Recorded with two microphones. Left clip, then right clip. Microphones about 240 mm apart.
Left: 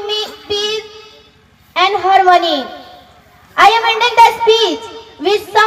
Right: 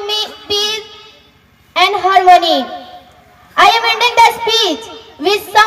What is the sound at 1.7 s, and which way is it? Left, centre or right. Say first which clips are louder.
Speech: even; right.